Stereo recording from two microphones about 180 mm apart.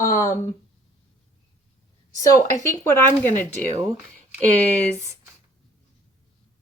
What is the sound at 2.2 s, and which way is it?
Speech, 20° left (ahead or behind).